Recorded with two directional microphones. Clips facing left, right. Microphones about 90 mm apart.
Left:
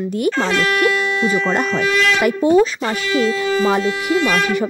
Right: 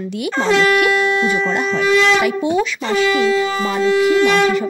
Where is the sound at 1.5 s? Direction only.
50° left (ahead or behind).